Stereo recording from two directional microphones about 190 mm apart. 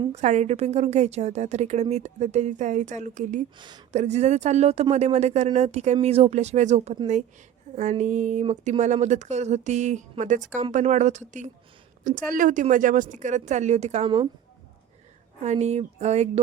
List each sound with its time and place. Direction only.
0.0 s speech: 35° right (ahead or behind)
3.6 s speech: 25° right (ahead or behind)
3.9 s speech: 35° right (ahead or behind)
15.4 s speech: 35° right (ahead or behind)